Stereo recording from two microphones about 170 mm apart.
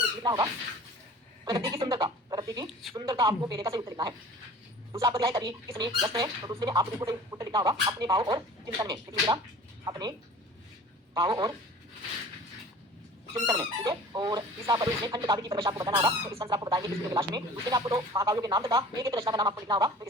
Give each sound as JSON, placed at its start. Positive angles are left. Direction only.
{"t": 0.2, "sound": "speech", "side_deg": -25}
{"t": 13.3, "sound": "speech", "side_deg": -25}